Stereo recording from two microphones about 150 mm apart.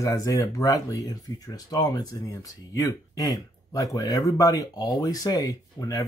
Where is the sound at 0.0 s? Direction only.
20° left (ahead or behind).